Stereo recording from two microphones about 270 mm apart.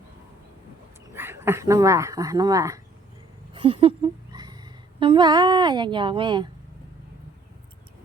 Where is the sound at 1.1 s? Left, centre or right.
Centre.